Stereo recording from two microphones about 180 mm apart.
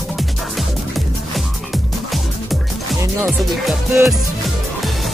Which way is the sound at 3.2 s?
Centre (ahead or behind).